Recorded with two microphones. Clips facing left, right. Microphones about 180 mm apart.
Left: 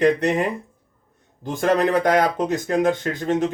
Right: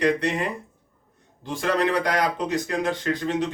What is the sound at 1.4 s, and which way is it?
Speech, 45° left (ahead or behind).